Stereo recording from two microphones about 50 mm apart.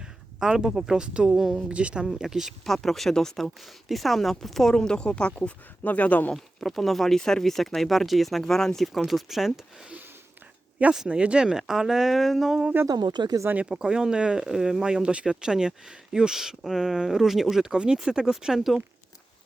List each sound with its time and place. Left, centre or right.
0.0 s speech: centre
1.4 s speech: centre
1.7 s speech: right
2.1 s speech: centre
2.6 s speech: centre
3.8 s speech: centre
4.8 s speech: centre
6.3 s speech: centre
11.1 s speech: right; by 12.5 s centre
12.7 s speech: right
13.6 s speech: centre